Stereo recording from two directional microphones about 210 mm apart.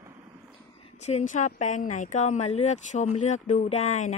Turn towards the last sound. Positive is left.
turn(degrees=35)  # may be behind; listen again after turning